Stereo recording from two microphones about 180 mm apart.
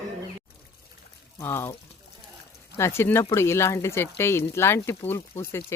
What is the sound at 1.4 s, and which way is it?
Speech, 15° left (ahead or behind).